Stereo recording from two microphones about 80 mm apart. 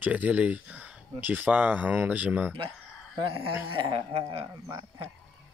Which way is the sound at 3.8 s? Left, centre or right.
Right.